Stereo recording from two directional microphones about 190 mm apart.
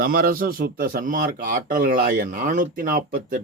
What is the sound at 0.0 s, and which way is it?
Speech, 50° right (ahead or behind).